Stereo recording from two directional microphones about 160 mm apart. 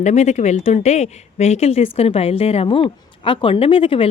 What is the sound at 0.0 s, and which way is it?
Speech, 45° left (ahead or behind).